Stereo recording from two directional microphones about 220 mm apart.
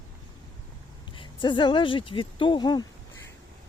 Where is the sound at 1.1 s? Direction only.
20° left (ahead or behind).